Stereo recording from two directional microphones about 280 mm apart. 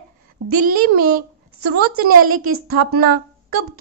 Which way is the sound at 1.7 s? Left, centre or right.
Right.